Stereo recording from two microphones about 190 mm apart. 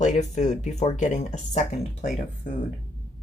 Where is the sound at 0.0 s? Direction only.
40° left (ahead or behind).